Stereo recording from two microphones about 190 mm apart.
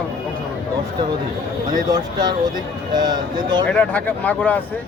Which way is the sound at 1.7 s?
20° right (ahead or behind).